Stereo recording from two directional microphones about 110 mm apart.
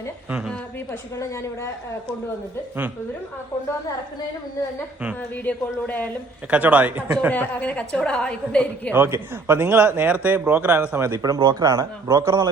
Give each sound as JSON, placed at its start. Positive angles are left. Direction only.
{"t": 1.2, "sound": "speech", "side_deg": 25}
{"t": 5.5, "sound": "a woman's voice", "side_deg": 15}
{"t": 6.5, "sound": "speech", "side_deg": -10}
{"t": 7.3, "sound": "a woman's voice", "side_deg": 15}
{"t": 8.9, "sound": "speech", "side_deg": -20}